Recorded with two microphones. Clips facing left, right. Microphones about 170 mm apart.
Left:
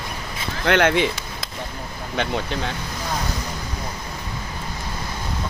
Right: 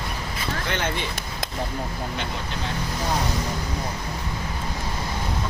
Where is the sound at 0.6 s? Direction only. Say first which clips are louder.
Left 12 dB; 75° left (ahead or behind).